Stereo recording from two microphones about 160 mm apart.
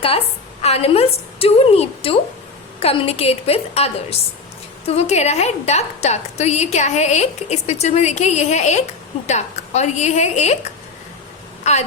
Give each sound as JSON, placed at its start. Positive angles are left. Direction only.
{"t": 0.6, "sound": "a woman's voice", "side_deg": 40}